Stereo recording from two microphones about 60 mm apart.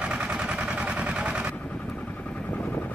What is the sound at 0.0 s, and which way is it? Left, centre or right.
Vehicle, centre.